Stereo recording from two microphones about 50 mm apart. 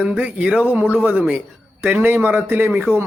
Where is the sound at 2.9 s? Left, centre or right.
Right.